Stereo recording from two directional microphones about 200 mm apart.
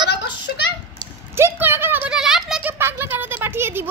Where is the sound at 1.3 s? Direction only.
10° right (ahead or behind).